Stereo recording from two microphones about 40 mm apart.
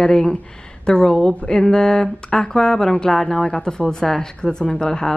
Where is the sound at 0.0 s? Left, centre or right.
Centre.